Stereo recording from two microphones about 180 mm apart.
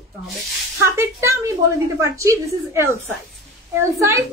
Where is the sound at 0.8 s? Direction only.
15° right (ahead or behind).